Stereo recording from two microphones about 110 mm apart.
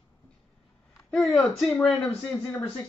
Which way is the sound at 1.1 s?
5° left (ahead or behind).